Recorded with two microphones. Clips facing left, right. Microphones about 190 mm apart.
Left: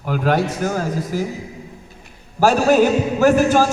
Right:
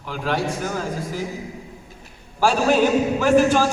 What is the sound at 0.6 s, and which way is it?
Speech, 45° left (ahead or behind).